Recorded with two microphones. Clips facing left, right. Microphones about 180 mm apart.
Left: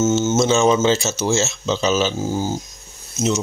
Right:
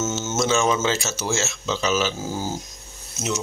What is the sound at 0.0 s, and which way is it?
Speech, 20° left (ahead or behind).